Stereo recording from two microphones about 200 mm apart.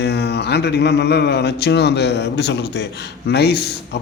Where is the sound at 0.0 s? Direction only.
55° left (ahead or behind).